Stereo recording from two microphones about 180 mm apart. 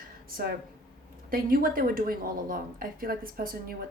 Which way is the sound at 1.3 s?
50° right (ahead or behind).